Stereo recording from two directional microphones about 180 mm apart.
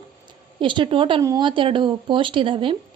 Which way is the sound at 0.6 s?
25° right (ahead or behind).